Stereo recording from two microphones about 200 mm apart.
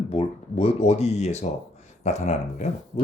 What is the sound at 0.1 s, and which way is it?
Speech, 30° left (ahead or behind).